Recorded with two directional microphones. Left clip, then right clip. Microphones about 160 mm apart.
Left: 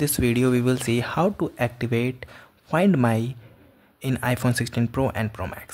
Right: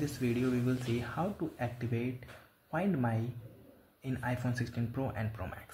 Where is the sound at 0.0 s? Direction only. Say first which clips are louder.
Left 12 dB; 50° left (ahead or behind).